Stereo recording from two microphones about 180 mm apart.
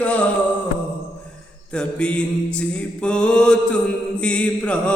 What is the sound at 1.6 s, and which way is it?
Mantra, 5° left (ahead or behind).